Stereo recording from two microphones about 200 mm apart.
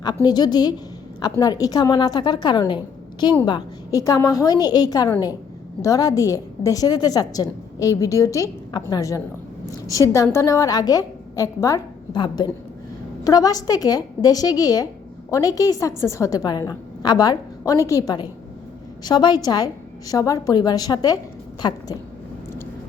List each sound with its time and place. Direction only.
0.0 s a woman's voice: 20° left (ahead or behind)